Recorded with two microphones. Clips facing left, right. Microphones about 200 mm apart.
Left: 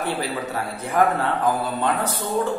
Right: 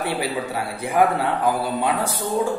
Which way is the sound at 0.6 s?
10° right (ahead or behind).